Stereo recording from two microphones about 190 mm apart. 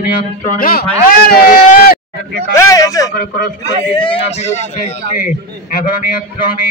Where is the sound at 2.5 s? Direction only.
15° left (ahead or behind); by 5.3 s 35° left (ahead or behind).